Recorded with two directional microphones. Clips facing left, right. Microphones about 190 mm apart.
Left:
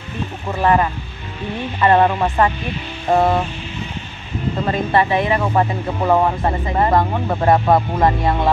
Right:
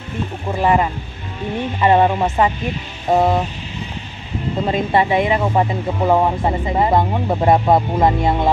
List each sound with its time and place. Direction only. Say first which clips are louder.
0.5 s speech: even; 15° right (ahead or behind)
4.6 s speech: right 1 dB; 15° right (ahead or behind)